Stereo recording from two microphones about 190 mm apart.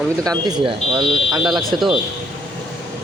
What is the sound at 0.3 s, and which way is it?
Speech, 20° right (ahead or behind).